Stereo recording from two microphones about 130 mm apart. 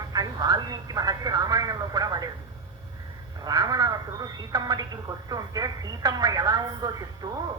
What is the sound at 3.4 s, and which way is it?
Telephone, 30° right (ahead or behind).